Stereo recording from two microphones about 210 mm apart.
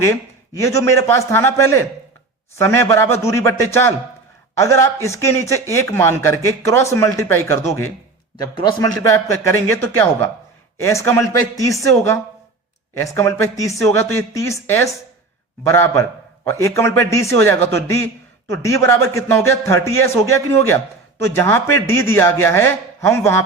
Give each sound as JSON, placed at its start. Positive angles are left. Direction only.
{"t": 0.6, "sound": "a man's voice", "side_deg": 15}